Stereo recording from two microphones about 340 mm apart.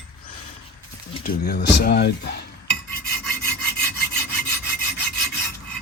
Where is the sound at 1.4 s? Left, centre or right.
Left.